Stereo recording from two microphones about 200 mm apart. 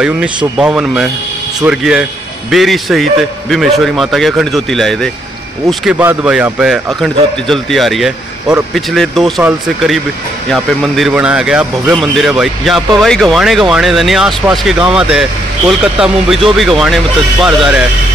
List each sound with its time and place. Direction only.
0.0 s speech: 5° right (ahead or behind)